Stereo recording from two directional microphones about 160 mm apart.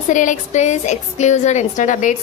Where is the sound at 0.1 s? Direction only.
50° left (ahead or behind).